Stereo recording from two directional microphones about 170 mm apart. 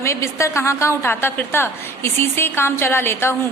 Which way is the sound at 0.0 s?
15° left (ahead or behind).